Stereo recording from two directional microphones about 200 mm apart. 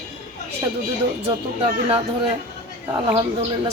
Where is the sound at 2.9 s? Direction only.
25° right (ahead or behind).